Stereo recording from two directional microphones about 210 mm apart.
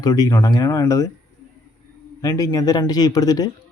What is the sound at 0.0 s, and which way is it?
Speech, 15° left (ahead or behind).